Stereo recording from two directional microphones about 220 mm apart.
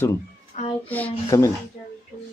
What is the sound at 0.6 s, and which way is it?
Speech, 30° left (ahead or behind).